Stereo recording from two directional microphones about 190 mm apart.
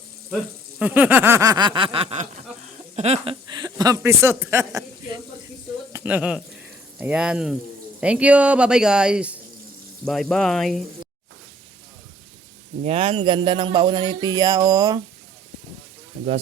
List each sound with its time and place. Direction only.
0.8 s speech: 10° right (ahead or behind); by 2.2 s 30° right (ahead or behind)
2.9 s a sound: 35° right (ahead or behind)
3.5 s speech: 20° right (ahead or behind); by 10.8 s centre (ahead or behind)
12.8 s speech: 30° right (ahead or behind)